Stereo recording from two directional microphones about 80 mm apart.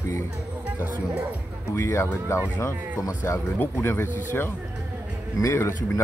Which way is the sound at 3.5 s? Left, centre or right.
Left.